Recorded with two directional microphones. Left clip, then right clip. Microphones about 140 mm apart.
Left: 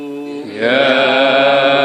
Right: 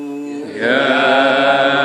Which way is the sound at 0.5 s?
45° left (ahead or behind).